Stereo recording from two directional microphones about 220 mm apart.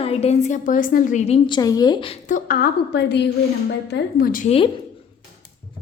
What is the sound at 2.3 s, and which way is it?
A woman's voice, 40° left (ahead or behind).